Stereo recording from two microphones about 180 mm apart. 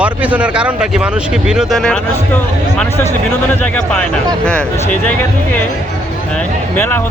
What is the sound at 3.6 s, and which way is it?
Speech, 5° left (ahead or behind).